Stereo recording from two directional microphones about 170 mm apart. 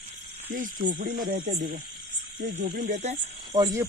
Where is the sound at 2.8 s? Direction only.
45° right (ahead or behind).